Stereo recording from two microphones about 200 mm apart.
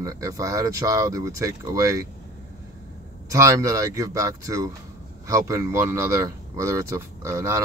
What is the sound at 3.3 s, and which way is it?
Speech, 15° right (ahead or behind).